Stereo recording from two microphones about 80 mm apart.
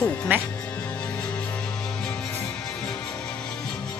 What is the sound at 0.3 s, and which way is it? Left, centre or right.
Speech, right.